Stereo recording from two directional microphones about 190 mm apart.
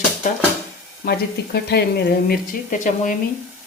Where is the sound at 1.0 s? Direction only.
55° left (ahead or behind).